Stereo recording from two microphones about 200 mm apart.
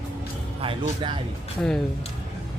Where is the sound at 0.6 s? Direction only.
25° right (ahead or behind).